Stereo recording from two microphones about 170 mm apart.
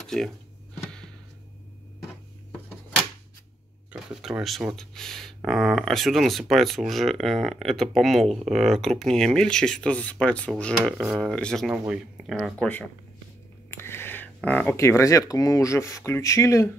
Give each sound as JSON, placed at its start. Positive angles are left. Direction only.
{"t": 0.0, "sound": "speech", "side_deg": 0}
{"t": 3.9, "sound": "speech", "side_deg": 0}
{"t": 13.7, "sound": "speech", "side_deg": 15}